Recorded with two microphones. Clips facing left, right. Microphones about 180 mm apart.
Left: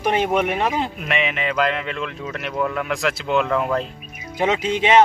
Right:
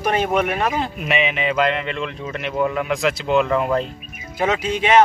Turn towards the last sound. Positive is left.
turn(degrees=25)  # may be behind; listen again after turning